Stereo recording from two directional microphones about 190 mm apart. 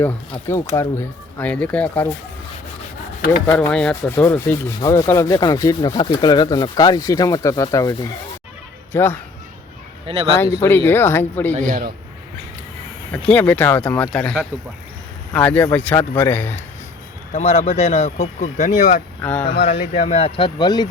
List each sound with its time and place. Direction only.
0.8 s speech: 10° left (ahead or behind)
3.4 s speech: 5° left (ahead or behind)
4.8 s rub: 20° left (ahead or behind)
8.9 s speech: 10° left (ahead or behind)
10.1 s speech: 30° right (ahead or behind)
10.6 s speech: 10° left (ahead or behind)
11.7 s a man's voice: 45° right (ahead or behind)
13.1 s speech: 10° left (ahead or behind)
17.3 s speech: 35° left (ahead or behind)
19.2 s speech: 10° left (ahead or behind)
19.6 s speech: 35° left (ahead or behind)